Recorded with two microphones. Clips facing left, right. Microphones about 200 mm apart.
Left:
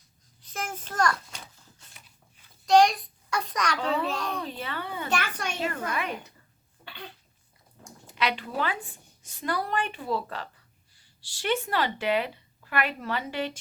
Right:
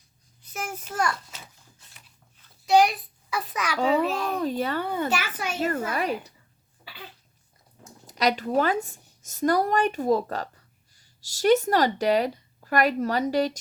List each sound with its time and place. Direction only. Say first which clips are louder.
0.5 s a child's voice: right 1 dB; 10° right (ahead or behind)
1.9 s a sound: left 1 dB; centre (ahead or behind)
3.8 s a child's voice: right 10 dB; 40° right (ahead or behind)
5.1 s a child's voice: right 1 dB; 5° right (ahead or behind)
5.5 s a woman's voice: right 5 dB; 45° right (ahead or behind)
6.8 s cough: left 1 dB; 5° right (ahead or behind)
8.0 s a woman's voice: right 5 dB; 40° right (ahead or behind)